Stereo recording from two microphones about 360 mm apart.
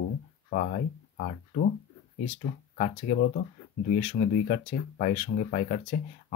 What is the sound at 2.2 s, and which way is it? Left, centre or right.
Speech, centre.